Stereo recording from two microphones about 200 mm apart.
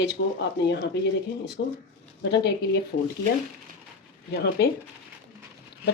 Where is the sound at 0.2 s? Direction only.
65° left (ahead or behind).